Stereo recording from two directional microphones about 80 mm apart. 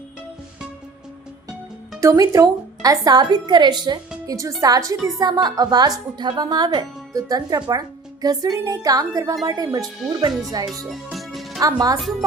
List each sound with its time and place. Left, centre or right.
2.0 s a woman's voice: right
4.3 s speech: right
5.2 s a woman's voice: right
7.1 s speech: right
10.7 s music: centre
11.6 s speech: right